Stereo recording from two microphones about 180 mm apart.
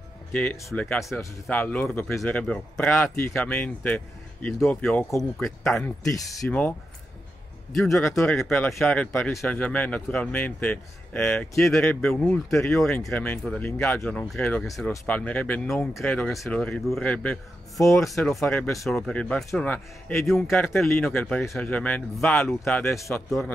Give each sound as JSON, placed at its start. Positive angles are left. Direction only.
{"t": 0.3, "sound": "speech", "side_deg": 5}
{"t": 7.7, "sound": "speech", "side_deg": 0}
{"t": 18.4, "sound": "speech", "side_deg": 10}